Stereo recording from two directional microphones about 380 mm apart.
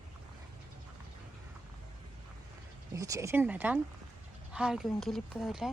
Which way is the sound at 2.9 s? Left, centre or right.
Centre.